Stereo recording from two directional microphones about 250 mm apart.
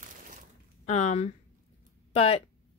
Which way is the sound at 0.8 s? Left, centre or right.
Left.